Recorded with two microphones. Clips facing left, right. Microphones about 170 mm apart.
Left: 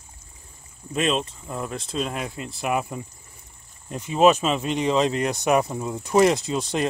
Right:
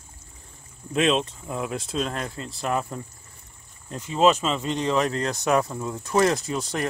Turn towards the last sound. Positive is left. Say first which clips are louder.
# left 3 dB
turn(degrees=15)  # may be behind; listen again after turning